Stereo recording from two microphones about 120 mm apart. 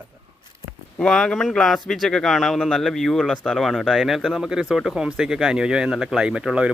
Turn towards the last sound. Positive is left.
turn(degrees=-10)  # may be behind; listen again after turning